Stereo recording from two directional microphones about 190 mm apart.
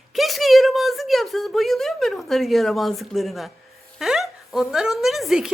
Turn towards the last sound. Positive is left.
turn(degrees=0)  # may be behind; listen again after turning